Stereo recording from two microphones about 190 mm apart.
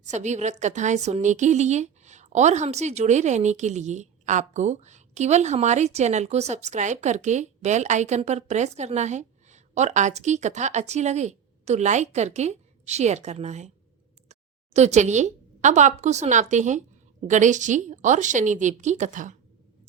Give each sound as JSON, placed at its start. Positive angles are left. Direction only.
{"t": 0.0, "sound": "a woman's voice", "side_deg": -40}